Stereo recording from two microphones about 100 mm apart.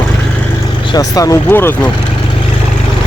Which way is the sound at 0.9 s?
35° left (ahead or behind).